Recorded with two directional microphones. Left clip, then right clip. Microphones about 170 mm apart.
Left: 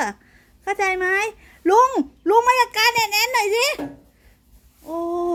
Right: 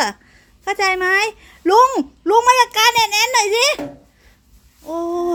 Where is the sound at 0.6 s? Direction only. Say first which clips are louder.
Right 4 dB; centre (ahead or behind).